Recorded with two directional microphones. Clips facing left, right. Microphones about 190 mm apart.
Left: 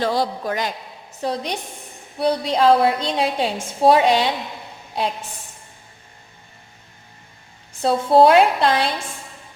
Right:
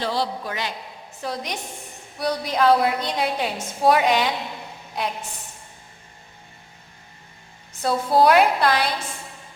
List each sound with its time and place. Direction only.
0.0 s a man's voice: 45° left (ahead or behind)
1.2 s a woman's voice: 30° left (ahead or behind)
7.8 s a woman's voice: 25° left (ahead or behind)